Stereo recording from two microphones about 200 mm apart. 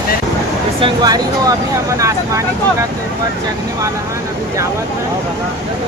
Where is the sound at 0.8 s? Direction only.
20° right (ahead or behind).